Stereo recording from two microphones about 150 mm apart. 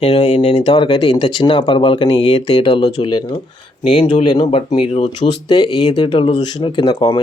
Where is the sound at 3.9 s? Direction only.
35° left (ahead or behind).